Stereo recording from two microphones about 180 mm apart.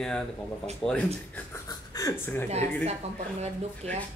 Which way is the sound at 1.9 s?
20° left (ahead or behind).